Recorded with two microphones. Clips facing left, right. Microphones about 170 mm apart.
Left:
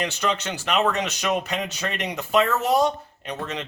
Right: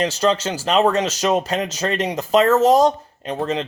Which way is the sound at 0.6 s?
35° right (ahead or behind).